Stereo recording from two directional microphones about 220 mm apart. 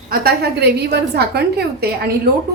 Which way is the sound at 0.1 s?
45° right (ahead or behind).